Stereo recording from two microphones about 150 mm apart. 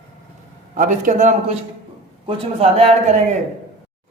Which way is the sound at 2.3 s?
40° right (ahead or behind).